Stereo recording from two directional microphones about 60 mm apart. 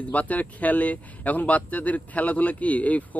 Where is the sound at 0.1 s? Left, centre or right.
Left.